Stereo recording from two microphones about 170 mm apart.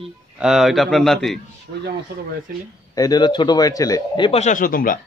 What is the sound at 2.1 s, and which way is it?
Speech, 75° right (ahead or behind).